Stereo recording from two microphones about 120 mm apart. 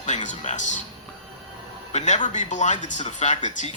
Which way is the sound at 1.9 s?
85° left.